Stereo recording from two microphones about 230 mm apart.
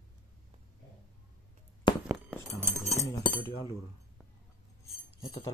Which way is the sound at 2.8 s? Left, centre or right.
Left.